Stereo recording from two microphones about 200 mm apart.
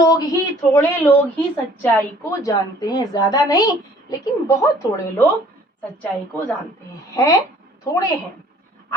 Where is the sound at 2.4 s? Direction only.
15° left (ahead or behind).